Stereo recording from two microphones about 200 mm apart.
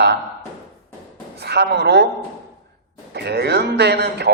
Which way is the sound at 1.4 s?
55° right (ahead or behind).